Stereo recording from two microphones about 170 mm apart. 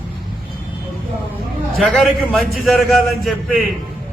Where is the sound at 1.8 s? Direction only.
5° left (ahead or behind).